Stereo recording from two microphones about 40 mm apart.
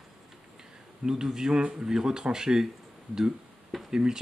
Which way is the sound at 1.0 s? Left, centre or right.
Centre.